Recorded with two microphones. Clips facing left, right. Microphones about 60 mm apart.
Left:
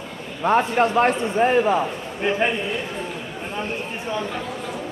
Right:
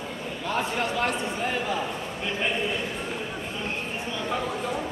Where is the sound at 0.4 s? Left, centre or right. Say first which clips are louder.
Left 10 dB; left.